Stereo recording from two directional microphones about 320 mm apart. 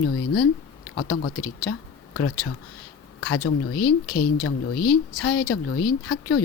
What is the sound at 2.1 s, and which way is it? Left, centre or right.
Speech, left.